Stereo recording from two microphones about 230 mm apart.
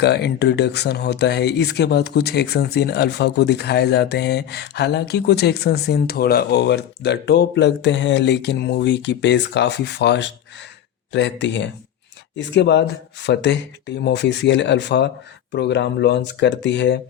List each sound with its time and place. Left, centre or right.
0.0 s speech: left